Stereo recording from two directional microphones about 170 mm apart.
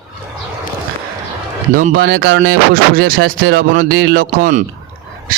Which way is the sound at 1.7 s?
55° right (ahead or behind).